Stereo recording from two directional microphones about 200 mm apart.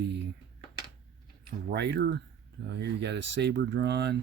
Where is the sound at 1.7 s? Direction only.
55° right (ahead or behind).